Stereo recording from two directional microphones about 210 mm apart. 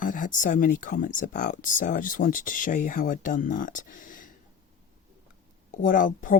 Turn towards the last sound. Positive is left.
turn(degrees=40)  # may be behind; listen again after turning